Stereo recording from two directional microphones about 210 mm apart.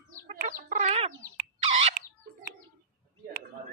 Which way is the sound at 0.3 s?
35° right (ahead or behind).